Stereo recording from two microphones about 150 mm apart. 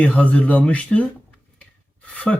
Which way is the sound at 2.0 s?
10° left (ahead or behind).